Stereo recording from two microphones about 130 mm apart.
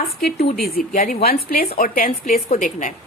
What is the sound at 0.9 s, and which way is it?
Speech, 85° left.